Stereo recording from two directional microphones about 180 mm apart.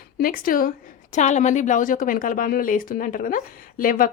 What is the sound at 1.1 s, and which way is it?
A woman's voice, 40° left (ahead or behind).